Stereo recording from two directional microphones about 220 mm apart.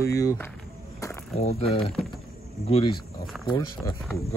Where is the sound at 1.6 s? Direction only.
25° left (ahead or behind).